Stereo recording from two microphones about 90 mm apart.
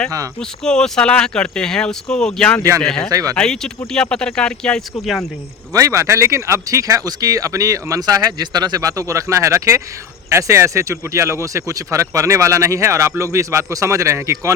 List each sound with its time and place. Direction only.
0.3 s speech: 10° left (ahead or behind)
3.1 s speech: 40° right (ahead or behind)
3.3 s speech: 5° left (ahead or behind)
5.7 s speech: 35° right (ahead or behind)